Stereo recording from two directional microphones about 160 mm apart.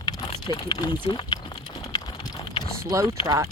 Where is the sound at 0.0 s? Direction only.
25° left (ahead or behind).